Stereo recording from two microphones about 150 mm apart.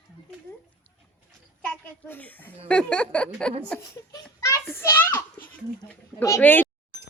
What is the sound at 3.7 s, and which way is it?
Speech, 25° left (ahead or behind).